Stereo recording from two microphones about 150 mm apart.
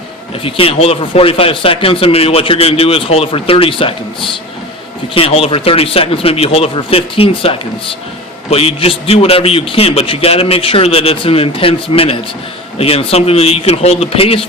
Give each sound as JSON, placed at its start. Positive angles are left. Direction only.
{"t": 0.4, "sound": "speech", "side_deg": 40}